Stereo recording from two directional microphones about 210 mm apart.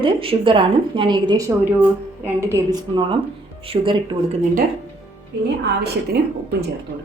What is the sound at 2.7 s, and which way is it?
A woman's voice, 20° right (ahead or behind).